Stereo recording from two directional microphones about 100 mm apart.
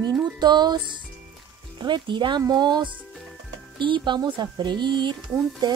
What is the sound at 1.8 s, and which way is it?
Speech, 50° right (ahead or behind).